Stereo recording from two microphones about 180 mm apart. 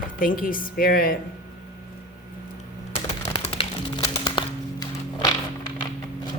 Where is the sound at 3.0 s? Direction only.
35° left (ahead or behind).